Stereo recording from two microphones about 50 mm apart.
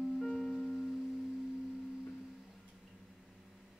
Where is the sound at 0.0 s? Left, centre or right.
Centre.